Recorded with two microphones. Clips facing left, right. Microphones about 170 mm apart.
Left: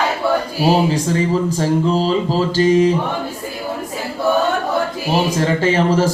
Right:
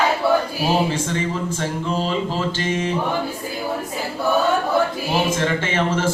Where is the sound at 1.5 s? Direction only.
35° left (ahead or behind).